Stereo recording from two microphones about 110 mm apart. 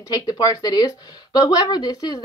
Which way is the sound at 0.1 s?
35° left (ahead or behind).